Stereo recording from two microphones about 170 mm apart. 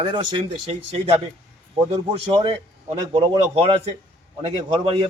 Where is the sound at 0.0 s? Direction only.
25° right (ahead or behind).